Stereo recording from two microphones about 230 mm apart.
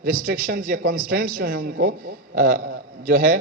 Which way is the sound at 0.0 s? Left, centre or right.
Right.